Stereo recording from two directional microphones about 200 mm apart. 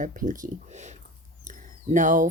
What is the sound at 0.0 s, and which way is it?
Speech, 40° right (ahead or behind).